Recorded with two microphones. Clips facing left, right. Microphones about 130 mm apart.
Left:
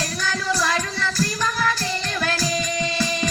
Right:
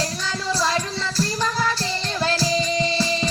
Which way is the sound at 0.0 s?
25° right (ahead or behind).